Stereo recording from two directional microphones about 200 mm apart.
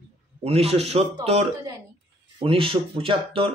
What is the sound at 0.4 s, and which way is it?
A man's voice, 30° right (ahead or behind).